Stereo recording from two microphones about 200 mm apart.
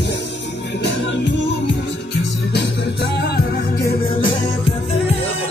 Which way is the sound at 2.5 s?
55° left (ahead or behind).